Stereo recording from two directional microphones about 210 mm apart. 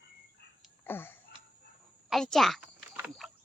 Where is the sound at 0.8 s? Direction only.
10° left (ahead or behind).